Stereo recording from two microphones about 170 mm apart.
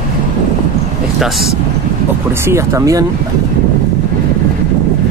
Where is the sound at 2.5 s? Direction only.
15° right (ahead or behind).